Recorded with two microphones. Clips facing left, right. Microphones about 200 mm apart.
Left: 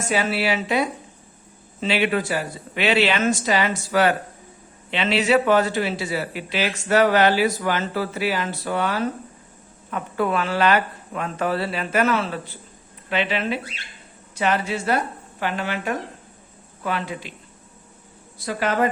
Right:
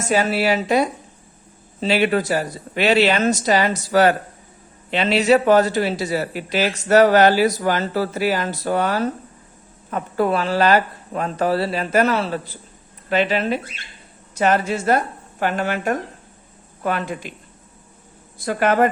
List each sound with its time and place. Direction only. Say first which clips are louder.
0.1 s speech: right 4 dB; 40° right (ahead or behind)
18.3 s speech: right 5 dB; 50° right (ahead or behind)